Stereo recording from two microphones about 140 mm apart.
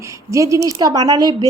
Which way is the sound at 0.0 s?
20° right (ahead or behind).